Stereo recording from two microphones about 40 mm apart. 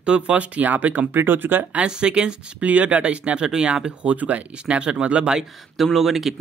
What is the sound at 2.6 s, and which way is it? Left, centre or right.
Speech, right.